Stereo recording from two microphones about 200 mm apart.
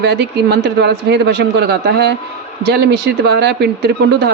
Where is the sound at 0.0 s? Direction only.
55° right (ahead or behind).